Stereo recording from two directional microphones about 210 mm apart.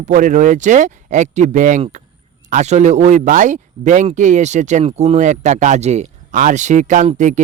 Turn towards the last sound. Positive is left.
turn(degrees=-35)  # may be behind; listen again after turning